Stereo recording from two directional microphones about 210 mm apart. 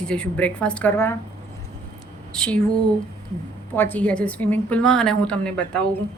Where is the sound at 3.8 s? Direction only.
10° left (ahead or behind).